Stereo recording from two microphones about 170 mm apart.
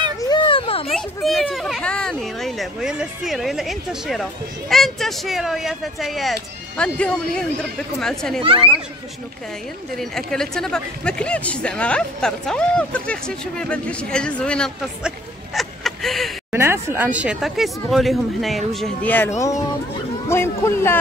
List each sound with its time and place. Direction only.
0.2 s children playing: 30° left (ahead or behind)
0.9 s speech: centre (ahead or behind)
8.4 s speech: 30° right (ahead or behind)
9.9 s speech: 5° left (ahead or behind)
16.5 s speech: 15° right (ahead or behind)
20.2 s speech: 15° left (ahead or behind)